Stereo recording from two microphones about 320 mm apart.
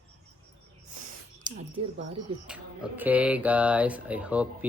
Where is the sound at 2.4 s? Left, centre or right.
Centre.